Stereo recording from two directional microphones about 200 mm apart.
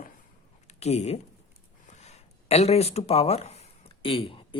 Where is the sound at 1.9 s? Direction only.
35° left (ahead or behind).